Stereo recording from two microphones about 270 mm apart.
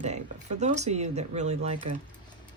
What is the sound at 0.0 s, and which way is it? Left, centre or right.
Speech, right.